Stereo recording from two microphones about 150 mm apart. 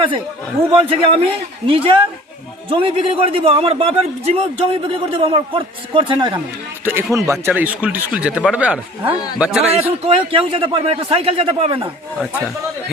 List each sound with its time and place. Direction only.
0.7 s a man's voice: 40° right (ahead or behind)
6.8 s speech: 15° right (ahead or behind)
9.7 s a man's voice: 40° right (ahead or behind)